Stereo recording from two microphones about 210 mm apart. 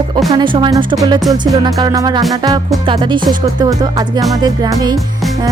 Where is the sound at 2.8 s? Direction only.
25° right (ahead or behind).